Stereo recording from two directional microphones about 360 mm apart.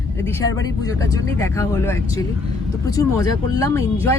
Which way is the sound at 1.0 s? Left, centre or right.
Centre.